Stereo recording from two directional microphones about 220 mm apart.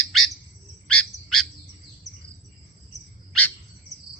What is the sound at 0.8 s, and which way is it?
Bird, 90° left.